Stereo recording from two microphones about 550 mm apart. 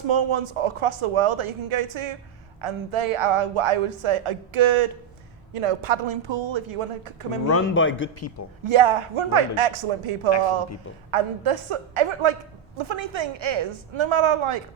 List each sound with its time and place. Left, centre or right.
0.1 s a woman's voice: right
5.5 s a woman's voice: right
7.4 s a man's voice: left
8.6 s a woman's voice: right